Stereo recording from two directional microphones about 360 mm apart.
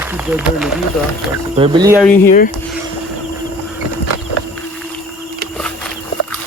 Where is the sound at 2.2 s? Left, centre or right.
Left.